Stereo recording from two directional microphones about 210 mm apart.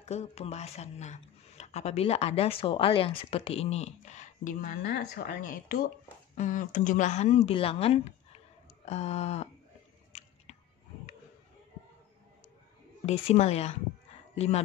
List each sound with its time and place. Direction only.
0.0 s speech: 30° left (ahead or behind)
13.0 s speech: 30° left (ahead or behind)